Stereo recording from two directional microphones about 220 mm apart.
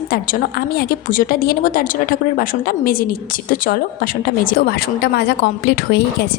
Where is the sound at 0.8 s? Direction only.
40° left (ahead or behind).